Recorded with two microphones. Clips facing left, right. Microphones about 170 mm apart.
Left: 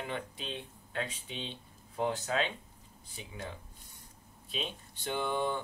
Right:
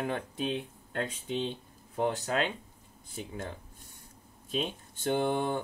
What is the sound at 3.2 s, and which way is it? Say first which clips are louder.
Speech: right 5 dB; 50° right (ahead or behind).